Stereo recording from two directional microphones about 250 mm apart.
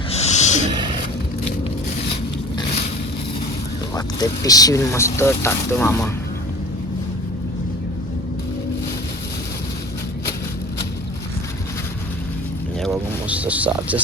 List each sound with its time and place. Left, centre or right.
0.1 s snort: left
0.7 s a sound: centre
3.9 s speech: centre
12.8 s boat: centre